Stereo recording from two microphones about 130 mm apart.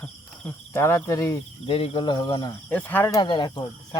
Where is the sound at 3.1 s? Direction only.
35° left (ahead or behind).